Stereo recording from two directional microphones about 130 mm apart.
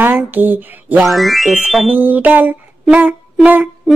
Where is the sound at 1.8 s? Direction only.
15° right (ahead or behind).